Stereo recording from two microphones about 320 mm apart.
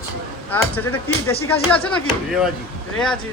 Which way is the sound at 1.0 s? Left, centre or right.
Centre.